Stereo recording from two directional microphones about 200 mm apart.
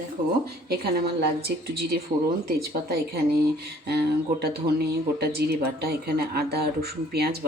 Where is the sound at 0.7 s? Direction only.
50° right (ahead or behind).